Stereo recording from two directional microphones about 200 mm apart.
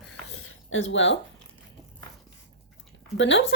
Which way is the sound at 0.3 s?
80° left.